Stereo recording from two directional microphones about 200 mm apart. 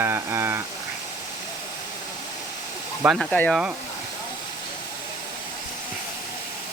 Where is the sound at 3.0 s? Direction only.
Centre (ahead or behind).